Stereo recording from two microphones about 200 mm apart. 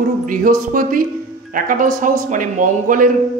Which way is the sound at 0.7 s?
45° right (ahead or behind).